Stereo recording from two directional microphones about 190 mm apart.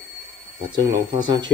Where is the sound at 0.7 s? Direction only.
25° right (ahead or behind).